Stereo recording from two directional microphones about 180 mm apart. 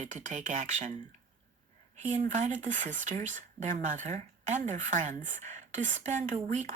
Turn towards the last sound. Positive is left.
turn(degrees=-40)  # may be behind; listen again after turning